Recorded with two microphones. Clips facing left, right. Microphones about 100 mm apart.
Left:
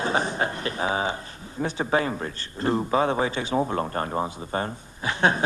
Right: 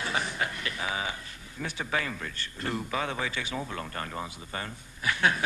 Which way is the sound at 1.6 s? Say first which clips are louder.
Left 8 dB; 30° left (ahead or behind).